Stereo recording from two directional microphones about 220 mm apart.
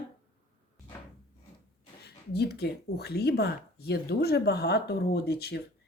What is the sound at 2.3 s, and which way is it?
A woman's voice, 45° left (ahead or behind).